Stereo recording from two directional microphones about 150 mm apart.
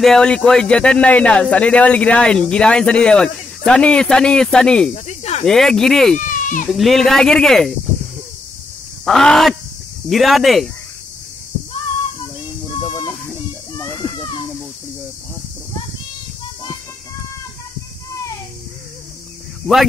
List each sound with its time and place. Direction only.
0.0 s speech: 5° left (ahead or behind)
4.9 s cricket: 45° left (ahead or behind)
5.4 s speech: 5° left (ahead or behind)
6.1 s goat: 60° left (ahead or behind)
6.7 s speech: centre (ahead or behind)
9.0 s speech: centre (ahead or behind)
13.1 s a sound: 5° left (ahead or behind)
13.8 s children playing: 15° left (ahead or behind)